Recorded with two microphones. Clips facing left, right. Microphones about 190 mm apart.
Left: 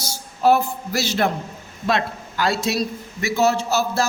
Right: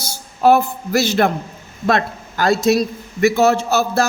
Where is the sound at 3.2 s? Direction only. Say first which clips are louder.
Right 5 dB; 55° right (ahead or behind).